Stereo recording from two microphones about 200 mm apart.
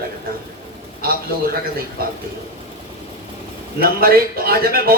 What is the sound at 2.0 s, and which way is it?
Speech, 50° right (ahead or behind).